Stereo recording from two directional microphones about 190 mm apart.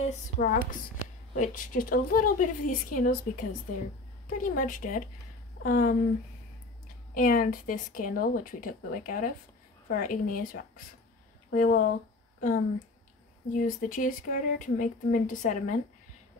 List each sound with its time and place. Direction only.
0.0 s speech: 40° left (ahead or behind)
7.2 s speech: 45° left (ahead or behind)